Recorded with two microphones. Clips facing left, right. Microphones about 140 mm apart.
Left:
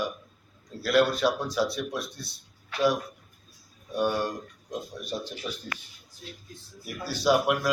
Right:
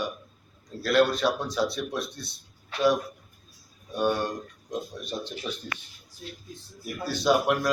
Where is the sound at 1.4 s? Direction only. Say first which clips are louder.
Even; 20° right (ahead or behind).